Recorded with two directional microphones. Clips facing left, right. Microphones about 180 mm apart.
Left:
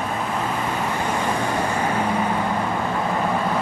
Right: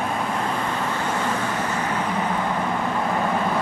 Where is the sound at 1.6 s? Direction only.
10° left (ahead or behind).